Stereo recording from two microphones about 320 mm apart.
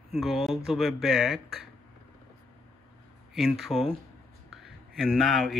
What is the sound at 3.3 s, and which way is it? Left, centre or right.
Speech, centre.